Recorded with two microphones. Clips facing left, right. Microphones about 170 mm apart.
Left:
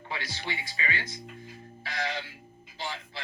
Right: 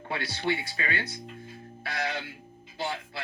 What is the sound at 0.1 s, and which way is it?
Speech, 60° right (ahead or behind).